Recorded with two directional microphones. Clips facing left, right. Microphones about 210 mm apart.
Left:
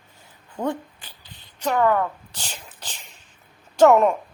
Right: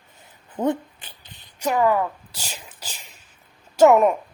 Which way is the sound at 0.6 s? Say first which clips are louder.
Right 4 dB; 20° right (ahead or behind).